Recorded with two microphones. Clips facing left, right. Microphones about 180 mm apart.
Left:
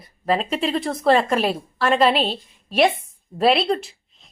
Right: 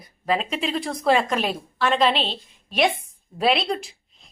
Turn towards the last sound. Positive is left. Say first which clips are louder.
# left 4 dB
turn(degrees=5)  # may be behind; listen again after turning